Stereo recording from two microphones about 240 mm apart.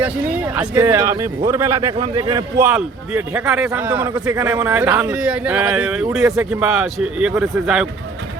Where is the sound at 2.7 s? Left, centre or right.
Centre.